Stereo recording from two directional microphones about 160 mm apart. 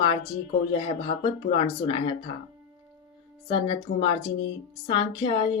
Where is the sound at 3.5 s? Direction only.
35° left (ahead or behind).